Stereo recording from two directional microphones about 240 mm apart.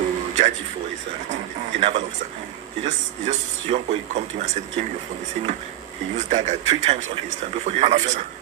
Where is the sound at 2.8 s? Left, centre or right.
Right.